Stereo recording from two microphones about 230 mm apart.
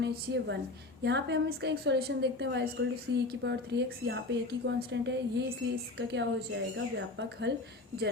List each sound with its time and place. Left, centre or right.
0.0 s a woman's voice: right